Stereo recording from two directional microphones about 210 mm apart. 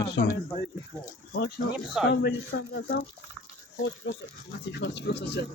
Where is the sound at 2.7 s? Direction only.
50° left (ahead or behind).